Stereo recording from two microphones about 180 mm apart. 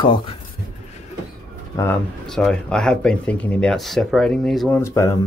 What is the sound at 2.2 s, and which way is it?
Speech, 5° left (ahead or behind).